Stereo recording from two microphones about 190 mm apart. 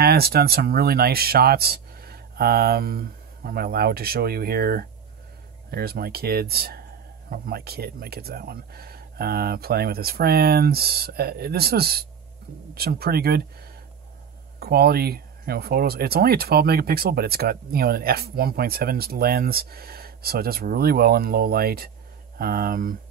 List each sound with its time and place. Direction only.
0.0 s speech: 55° right (ahead or behind)
14.6 s speech: 55° right (ahead or behind)